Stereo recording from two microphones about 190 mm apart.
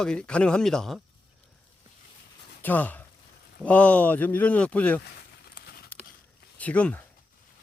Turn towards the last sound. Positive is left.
turn(degrees=5)  # may be behind; listen again after turning